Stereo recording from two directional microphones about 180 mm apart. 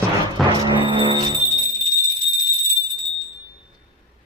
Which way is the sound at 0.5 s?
25° right (ahead or behind).